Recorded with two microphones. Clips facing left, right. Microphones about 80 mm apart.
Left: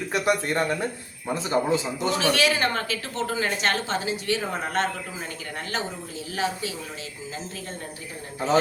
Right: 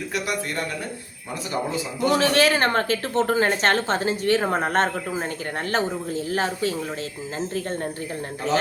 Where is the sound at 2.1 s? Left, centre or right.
Right.